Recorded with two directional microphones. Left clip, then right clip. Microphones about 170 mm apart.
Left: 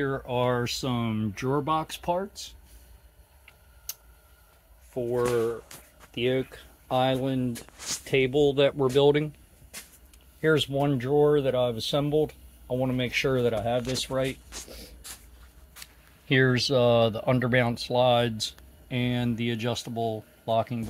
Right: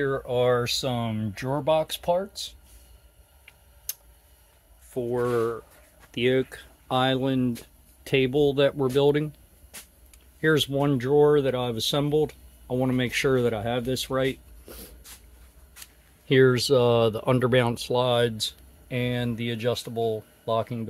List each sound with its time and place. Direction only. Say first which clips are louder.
0.0 s speech: right 3 dB; 20° right (ahead or behind)
3.9 s tick: right 2 dB; 20° right (ahead or behind)
4.9 s speech: even; 35° right (ahead or behind)
8.0 s speech: right 1 dB; 45° right (ahead or behind); by 9.3 s 30° right (ahead or behind)
10.4 s speech: right 1 dB; 35° right (ahead or behind)
15.8 s speech: left 1 dB; 30° right (ahead or behind)
18.9 s speech: right 1 dB; 15° right (ahead or behind)